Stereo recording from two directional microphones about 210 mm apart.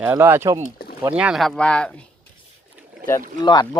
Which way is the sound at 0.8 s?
45° left (ahead or behind).